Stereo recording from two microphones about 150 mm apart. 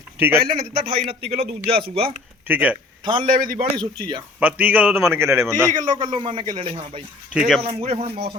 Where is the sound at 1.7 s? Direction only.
85° right.